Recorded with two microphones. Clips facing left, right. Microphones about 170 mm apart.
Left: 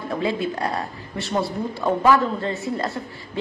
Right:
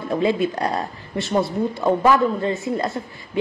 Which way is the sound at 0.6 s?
40° right (ahead or behind).